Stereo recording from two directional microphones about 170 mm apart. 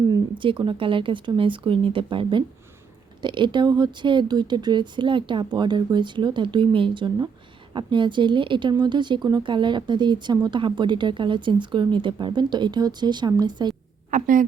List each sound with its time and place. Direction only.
0.1 s a woman's voice: 30° right (ahead or behind)
14.1 s a woman's voice: 50° right (ahead or behind)